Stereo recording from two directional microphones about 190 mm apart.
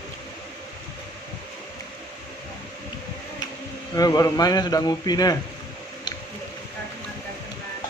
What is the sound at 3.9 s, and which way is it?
Speech, 20° left (ahead or behind).